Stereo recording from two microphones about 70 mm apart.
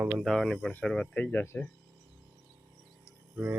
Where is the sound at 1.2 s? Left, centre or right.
Left.